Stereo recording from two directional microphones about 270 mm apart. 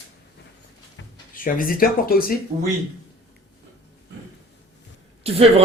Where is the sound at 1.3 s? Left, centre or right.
Left.